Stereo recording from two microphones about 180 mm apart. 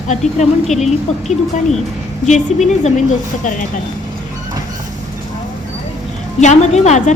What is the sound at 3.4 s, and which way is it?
Speech, 45° left (ahead or behind).